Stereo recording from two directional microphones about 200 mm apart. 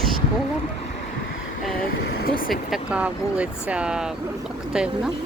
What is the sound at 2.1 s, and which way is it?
Speech, 50° left (ahead or behind).